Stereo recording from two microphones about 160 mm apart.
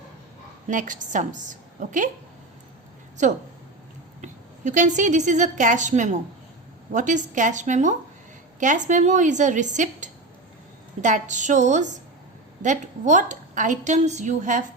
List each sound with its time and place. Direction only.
0.7 s a woman's voice: 55° right (ahead or behind)
3.2 s a woman's voice: 50° right (ahead or behind)